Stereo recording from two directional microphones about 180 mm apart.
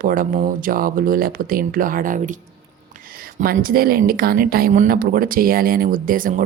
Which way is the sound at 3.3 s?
55° right (ahead or behind).